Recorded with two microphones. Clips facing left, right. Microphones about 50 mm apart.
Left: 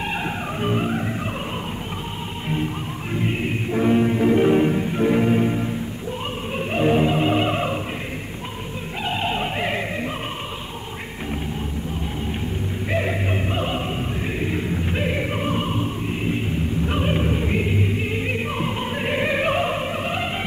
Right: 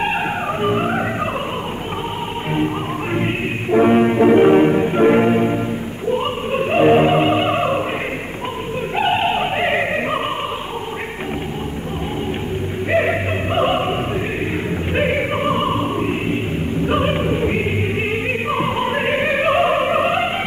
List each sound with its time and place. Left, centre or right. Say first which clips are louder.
0.6 s music: right 4 dB; right
3.2 s music: left 1 dB; right
7.3 s opera: right 4 dB; right
9.0 s opera: right 6 dB; right
13.6 s opera: right 8 dB; right
15.0 s opera: right 9 dB; right
16.8 s music: right 6 dB; right